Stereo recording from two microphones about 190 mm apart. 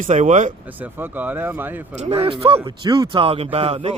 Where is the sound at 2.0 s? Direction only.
35° right (ahead or behind).